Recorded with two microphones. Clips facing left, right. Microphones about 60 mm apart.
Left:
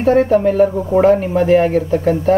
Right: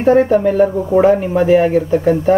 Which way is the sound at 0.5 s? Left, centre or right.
Centre.